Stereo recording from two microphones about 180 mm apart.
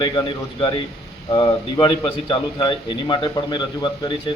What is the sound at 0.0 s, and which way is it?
A man's voice, 25° left (ahead or behind).